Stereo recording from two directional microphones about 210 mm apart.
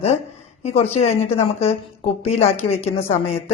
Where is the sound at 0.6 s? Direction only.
30° left (ahead or behind).